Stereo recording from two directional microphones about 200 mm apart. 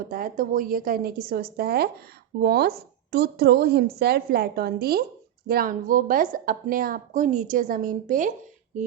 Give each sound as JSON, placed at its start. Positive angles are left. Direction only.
{"t": 0.1, "sound": "a woman's voice", "side_deg": -45}